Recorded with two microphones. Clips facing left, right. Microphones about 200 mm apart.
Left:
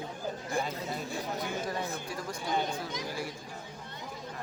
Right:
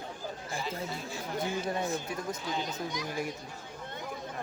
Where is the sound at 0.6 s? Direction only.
55° left (ahead or behind).